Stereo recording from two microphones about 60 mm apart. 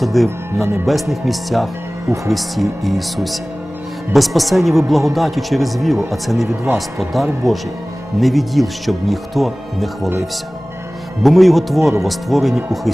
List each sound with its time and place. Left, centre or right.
0.0 s speech: centre
0.3 s speech: right
0.9 s speech: centre
11.2 s speech: centre